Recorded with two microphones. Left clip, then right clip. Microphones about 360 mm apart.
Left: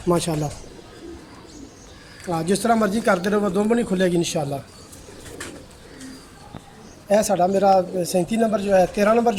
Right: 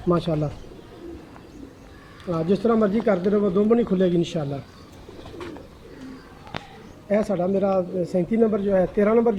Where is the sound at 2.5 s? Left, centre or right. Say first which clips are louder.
Left 1 dB; left.